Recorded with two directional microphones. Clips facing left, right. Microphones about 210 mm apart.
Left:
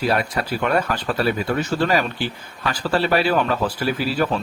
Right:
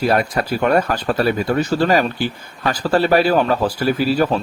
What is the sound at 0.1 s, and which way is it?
Speech, 45° right (ahead or behind).